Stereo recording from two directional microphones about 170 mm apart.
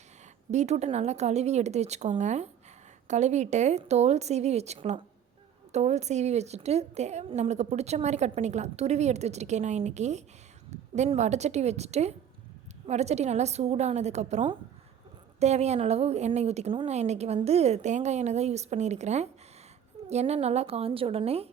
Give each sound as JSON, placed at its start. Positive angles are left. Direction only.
{"t": 0.5, "sound": "a woman's voice", "side_deg": -40}